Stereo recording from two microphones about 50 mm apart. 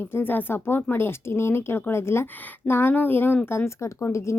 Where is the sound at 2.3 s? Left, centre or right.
Left.